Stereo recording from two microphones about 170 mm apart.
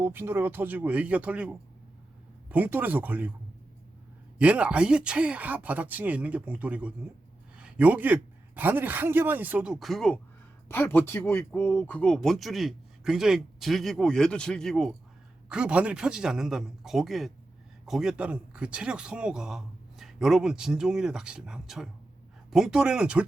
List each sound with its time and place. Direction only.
0.0 s speech: 15° right (ahead or behind)
4.4 s a man's voice: 5° right (ahead or behind)